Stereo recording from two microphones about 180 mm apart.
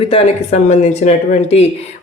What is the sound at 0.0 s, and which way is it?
Speech, 35° left (ahead or behind).